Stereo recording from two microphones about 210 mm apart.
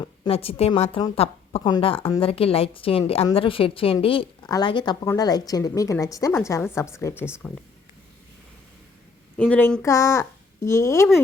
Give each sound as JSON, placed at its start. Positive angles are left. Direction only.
{"t": 0.0, "sound": "a woman's voice", "side_deg": 30}
{"t": 9.4, "sound": "a woman's voice", "side_deg": 5}